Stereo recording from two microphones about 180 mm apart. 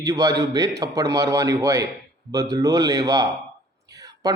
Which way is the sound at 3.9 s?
20° right (ahead or behind).